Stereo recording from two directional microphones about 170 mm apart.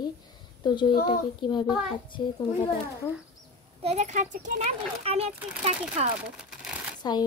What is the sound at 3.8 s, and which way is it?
Speech, 45° right (ahead or behind).